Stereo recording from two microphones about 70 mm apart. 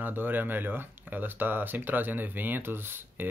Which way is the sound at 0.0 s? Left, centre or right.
Right.